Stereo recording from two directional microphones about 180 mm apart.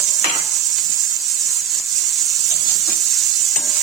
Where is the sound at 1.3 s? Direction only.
Centre (ahead or behind).